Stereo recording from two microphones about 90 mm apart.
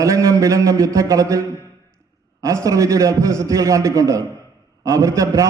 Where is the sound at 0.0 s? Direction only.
35° right (ahead or behind).